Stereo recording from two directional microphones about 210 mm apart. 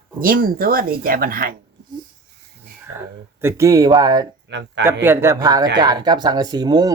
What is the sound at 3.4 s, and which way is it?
Speech, 15° right (ahead or behind).